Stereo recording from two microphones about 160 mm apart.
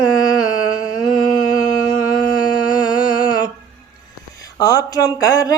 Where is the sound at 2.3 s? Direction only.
25° left (ahead or behind).